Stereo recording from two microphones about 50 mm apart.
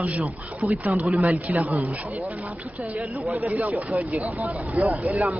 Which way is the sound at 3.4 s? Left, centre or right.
Right.